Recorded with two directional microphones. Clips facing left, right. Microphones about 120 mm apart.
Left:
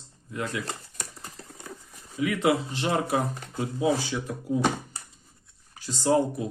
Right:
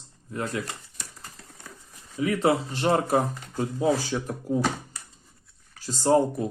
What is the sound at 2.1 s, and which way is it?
Speech, 35° right (ahead or behind).